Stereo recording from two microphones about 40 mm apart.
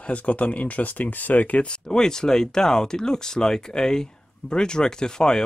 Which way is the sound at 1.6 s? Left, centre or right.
Centre.